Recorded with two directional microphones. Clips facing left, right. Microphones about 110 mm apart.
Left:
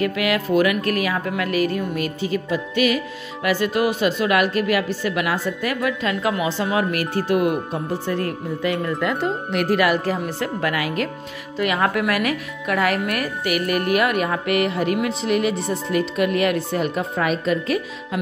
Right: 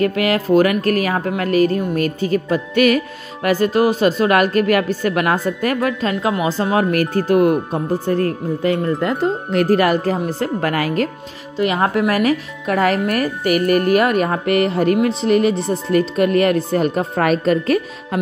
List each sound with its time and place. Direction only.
0.0 s a woman's voice: 40° right (ahead or behind)
3.4 s a woman's voice: 40° right (ahead or behind)
11.5 s a woman's voice: 30° right (ahead or behind); by 17.8 s 45° right (ahead or behind)